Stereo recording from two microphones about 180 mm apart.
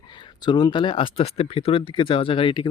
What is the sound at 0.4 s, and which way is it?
Speech, 25° left (ahead or behind).